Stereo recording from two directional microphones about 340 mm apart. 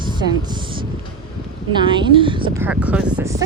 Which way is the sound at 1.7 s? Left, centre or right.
Centre.